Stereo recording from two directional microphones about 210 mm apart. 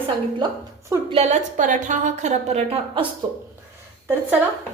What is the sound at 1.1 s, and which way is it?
A woman's voice, 30° right (ahead or behind).